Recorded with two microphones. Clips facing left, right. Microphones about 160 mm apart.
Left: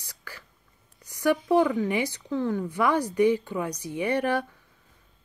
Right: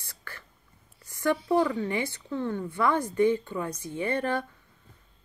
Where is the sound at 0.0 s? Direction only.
10° left (ahead or behind).